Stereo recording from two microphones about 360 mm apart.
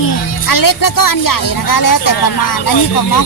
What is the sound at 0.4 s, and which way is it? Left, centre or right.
Speech, left.